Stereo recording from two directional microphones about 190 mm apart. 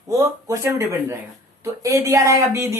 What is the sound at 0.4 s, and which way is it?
A woman's voice, 15° right (ahead or behind).